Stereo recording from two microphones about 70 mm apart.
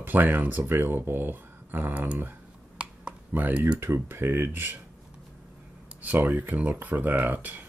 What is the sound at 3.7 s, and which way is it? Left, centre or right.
Speech, right.